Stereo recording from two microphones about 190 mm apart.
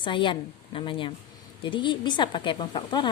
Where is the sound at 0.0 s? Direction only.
25° left (ahead or behind).